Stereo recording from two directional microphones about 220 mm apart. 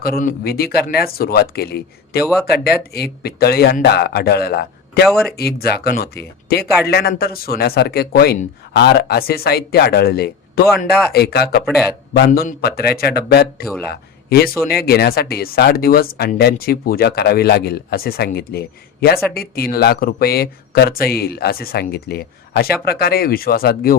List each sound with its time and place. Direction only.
0.0 s speech: 40° left (ahead or behind)
2.2 s speech: centre (ahead or behind)
2.5 s speech: 45° left (ahead or behind)
5.0 s speech: centre (ahead or behind)
5.4 s speech: 45° left (ahead or behind)
11.6 s speech: centre (ahead or behind)
12.1 s speech: 45° left (ahead or behind)